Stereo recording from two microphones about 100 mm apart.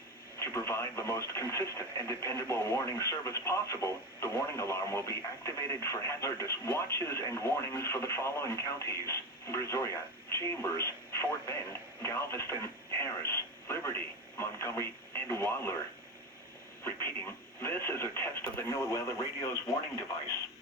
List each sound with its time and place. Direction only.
0.3 s speech: 30° left (ahead or behind)
16.8 s speech: 25° left (ahead or behind)